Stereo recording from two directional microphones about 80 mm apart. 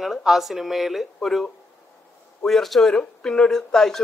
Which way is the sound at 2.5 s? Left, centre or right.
Centre.